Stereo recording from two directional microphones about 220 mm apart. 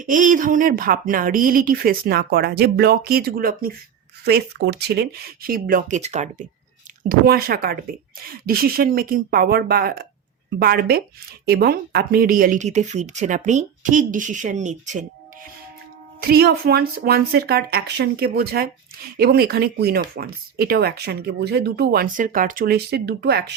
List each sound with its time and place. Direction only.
0.0 s speech: 35° right (ahead or behind)
7.1 s speech: 45° right (ahead or behind)
16.2 s speech: 45° right (ahead or behind)